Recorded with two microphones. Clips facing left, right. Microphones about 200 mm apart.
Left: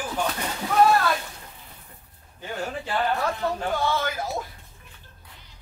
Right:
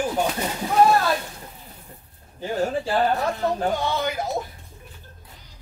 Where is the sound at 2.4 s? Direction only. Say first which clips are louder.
Right 7 dB; 35° right (ahead or behind).